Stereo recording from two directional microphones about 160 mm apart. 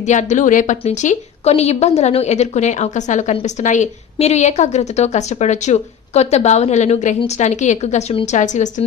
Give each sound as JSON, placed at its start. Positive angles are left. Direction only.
{"t": 0.0, "sound": "a woman's voice", "side_deg": 45}